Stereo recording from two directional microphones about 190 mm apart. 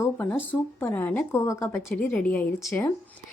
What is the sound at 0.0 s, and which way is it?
A woman's voice, 10° left (ahead or behind).